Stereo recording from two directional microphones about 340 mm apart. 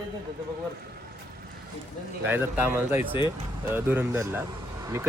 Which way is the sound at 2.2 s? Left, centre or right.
Centre.